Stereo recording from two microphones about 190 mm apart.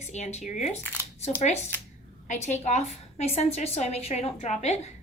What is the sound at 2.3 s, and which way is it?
A woman's voice, 35° left (ahead or behind).